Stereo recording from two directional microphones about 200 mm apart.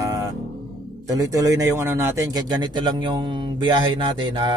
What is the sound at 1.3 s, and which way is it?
Speech, 15° right (ahead or behind).